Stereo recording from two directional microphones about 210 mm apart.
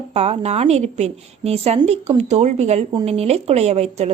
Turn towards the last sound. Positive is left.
turn(degrees=-30)  # may be behind; listen again after turning